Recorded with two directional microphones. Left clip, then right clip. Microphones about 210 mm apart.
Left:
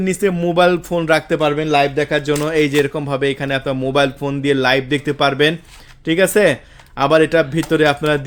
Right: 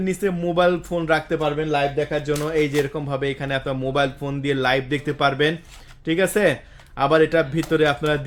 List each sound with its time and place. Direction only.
0.0 s speech: 35° left (ahead or behind)